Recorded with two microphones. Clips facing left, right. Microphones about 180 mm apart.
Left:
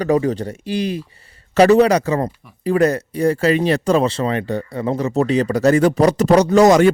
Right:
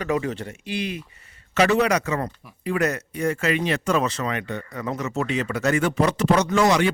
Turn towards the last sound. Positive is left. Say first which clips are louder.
# left 8 dB
turn(degrees=45)  # may be behind; listen again after turning